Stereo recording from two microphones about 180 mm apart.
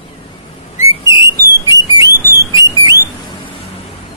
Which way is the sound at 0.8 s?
25° left (ahead or behind).